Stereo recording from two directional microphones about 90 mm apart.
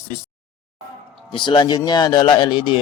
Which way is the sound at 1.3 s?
60° left (ahead or behind).